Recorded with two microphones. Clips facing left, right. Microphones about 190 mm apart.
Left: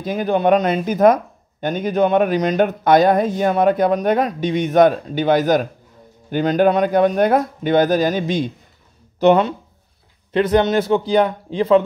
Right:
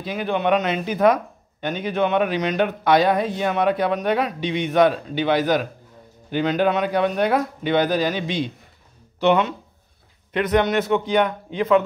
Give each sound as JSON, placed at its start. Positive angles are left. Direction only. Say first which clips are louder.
{"t": 0.0, "sound": "a man's voice", "louder": "left 5 dB", "side_deg": 45}
{"t": 10.3, "sound": "a man's voice", "louder": "left 4 dB", "side_deg": 30}